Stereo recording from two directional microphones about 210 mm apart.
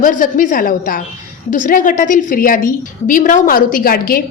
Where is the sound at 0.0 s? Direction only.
40° left (ahead or behind).